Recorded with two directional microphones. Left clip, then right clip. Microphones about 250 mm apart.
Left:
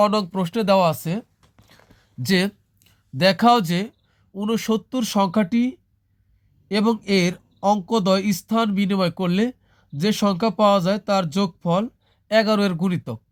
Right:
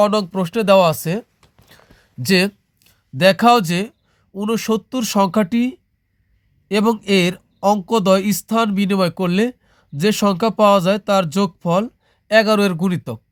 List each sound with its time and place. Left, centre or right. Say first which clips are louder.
0.0 s speech: right 3 dB; centre
1.4 s a sound: right 4 dB; right
4.4 s speech: right 3 dB; right